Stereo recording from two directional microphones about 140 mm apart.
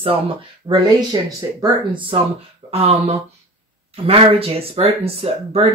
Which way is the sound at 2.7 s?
45° right (ahead or behind).